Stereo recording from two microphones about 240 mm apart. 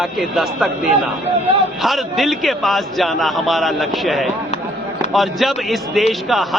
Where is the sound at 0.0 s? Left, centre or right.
Centre.